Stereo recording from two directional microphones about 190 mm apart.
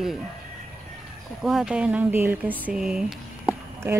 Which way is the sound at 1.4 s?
Centre (ahead or behind).